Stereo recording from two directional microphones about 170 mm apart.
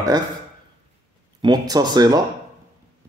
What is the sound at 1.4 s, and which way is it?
Speech, 25° right (ahead or behind).